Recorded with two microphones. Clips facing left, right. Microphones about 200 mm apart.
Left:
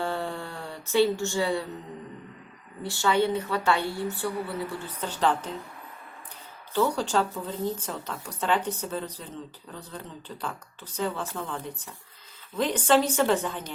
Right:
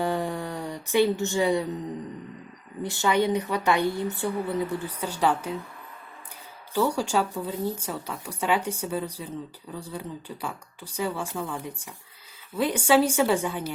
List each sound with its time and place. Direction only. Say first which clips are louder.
0.0 s a sound: right 3 dB; 15° right (ahead or behind)
2.8 s a woman's voice: right 1 dB; 20° right (ahead or behind)
6.7 s a woman's voice: right 1 dB; 10° right (ahead or behind)